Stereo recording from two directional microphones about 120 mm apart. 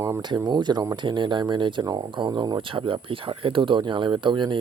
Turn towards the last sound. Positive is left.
turn(degrees=-40)  # may be behind; listen again after turning